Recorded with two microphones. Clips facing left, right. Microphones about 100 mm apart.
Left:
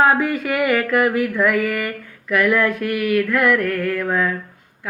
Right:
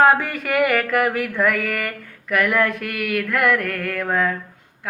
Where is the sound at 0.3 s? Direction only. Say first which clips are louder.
Left 1 dB; 50° right (ahead or behind).